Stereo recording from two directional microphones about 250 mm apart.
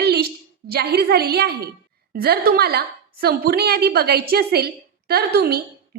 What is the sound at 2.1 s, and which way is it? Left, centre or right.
A woman's voice, right.